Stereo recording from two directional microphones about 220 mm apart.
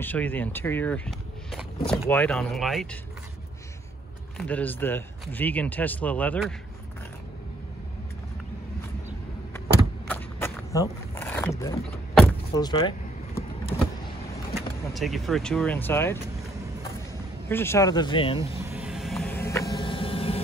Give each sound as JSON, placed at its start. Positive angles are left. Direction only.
{"t": 0.0, "sound": "speech", "side_deg": 10}
{"t": 4.4, "sound": "speech", "side_deg": 5}
{"t": 10.0, "sound": "a sound", "side_deg": 10}
{"t": 12.5, "sound": "vehicle", "side_deg": 15}
{"t": 14.5, "sound": "speech", "side_deg": 0}
{"t": 17.5, "sound": "speech", "side_deg": 10}
{"t": 18.7, "sound": "a sound", "side_deg": -5}